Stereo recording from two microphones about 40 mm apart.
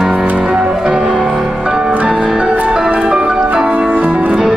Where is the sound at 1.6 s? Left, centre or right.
Right.